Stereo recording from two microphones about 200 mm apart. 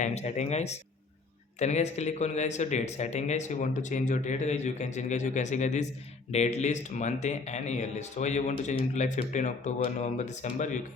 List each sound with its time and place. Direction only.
0.0 s a man's voice: 35° left (ahead or behind)